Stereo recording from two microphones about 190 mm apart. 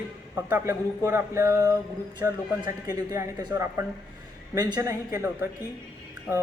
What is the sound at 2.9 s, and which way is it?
A man's voice, 15° right (ahead or behind).